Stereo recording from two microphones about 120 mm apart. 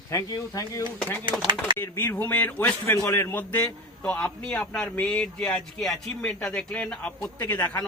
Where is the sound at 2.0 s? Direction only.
15° left (ahead or behind).